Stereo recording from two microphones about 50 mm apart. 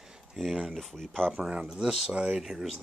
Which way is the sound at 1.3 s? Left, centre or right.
Centre.